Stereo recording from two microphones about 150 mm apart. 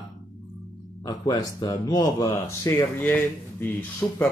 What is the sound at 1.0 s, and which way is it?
Speech, 25° left (ahead or behind).